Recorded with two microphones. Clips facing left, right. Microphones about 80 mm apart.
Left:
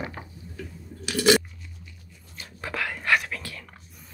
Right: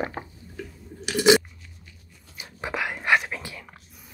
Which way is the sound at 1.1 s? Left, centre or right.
Centre.